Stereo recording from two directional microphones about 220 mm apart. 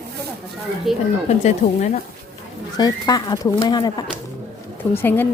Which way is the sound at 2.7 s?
20° left (ahead or behind).